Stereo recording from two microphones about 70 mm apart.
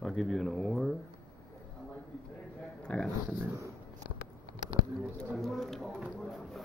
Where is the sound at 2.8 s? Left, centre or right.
Centre.